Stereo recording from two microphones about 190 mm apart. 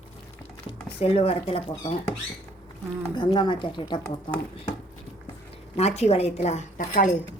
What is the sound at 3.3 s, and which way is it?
Speech, 25° left (ahead or behind).